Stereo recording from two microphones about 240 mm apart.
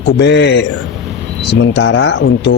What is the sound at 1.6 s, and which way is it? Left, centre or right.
Speech, left.